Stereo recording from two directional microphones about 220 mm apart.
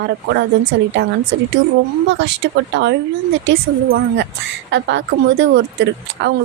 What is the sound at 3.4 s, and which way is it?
Speech, 55° right (ahead or behind).